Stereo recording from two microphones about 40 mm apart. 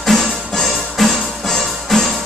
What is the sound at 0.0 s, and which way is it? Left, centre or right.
Music, centre.